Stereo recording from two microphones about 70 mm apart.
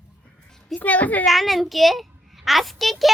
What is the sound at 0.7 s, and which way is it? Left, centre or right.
Speech, left.